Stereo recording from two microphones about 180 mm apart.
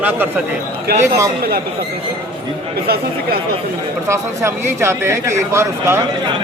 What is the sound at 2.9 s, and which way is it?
Speech, 60° right (ahead or behind).